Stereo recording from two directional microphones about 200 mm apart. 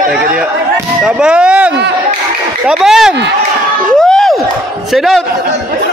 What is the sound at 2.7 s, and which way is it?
Speech, 5° right (ahead or behind).